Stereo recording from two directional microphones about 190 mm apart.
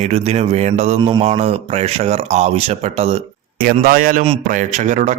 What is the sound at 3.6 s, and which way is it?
A man's voice, 50° right (ahead or behind).